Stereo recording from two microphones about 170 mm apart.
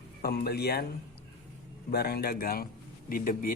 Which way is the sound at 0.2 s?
65° left (ahead or behind).